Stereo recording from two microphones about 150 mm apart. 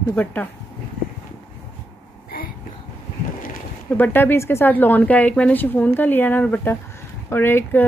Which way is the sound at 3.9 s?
15° left (ahead or behind).